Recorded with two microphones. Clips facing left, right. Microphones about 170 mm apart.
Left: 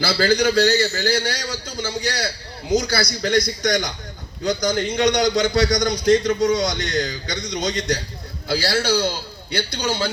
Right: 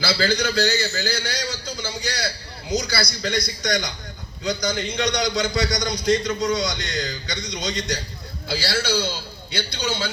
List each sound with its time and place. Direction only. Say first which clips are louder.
0.0 s a man's voice: left 4 dB; 50° left (ahead or behind)